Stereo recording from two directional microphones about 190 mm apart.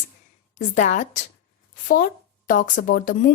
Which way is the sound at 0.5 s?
40° left (ahead or behind).